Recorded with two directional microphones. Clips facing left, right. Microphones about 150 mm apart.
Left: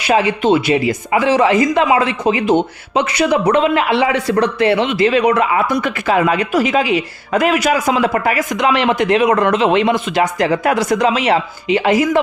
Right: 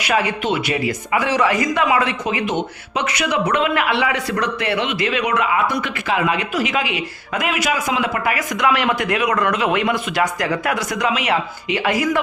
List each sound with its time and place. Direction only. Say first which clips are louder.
0.0 s speech: left 6 dB; 30° left (ahead or behind)